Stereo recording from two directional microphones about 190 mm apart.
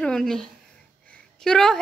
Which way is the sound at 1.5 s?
5° left (ahead or behind).